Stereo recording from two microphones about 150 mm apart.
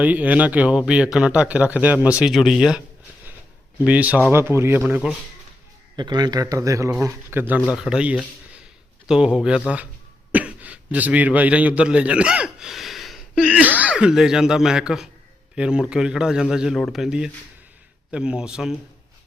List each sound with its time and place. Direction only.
0.0 s speech: 10° right (ahead or behind)
3.8 s speech: 10° right (ahead or behind)
6.0 s a man's voice: 30° right (ahead or behind); by 9.6 s 5° right (ahead or behind)
10.3 s a sound: 10° right (ahead or behind)
13.7 s speech: 5° right (ahead or behind)